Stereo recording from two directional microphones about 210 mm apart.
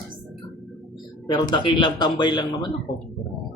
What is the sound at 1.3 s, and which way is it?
A man's voice, 20° left (ahead or behind).